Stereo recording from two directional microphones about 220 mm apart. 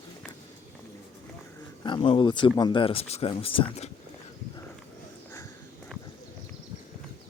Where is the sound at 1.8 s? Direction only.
20° left (ahead or behind).